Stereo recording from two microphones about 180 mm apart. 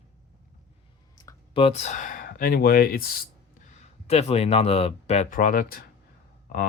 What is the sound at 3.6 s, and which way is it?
Speech, 35° left (ahead or behind).